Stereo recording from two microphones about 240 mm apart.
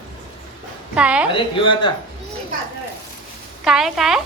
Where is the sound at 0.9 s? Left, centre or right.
Centre.